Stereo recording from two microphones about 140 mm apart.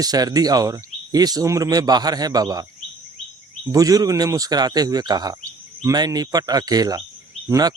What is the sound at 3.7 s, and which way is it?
Speech, 25° right (ahead or behind).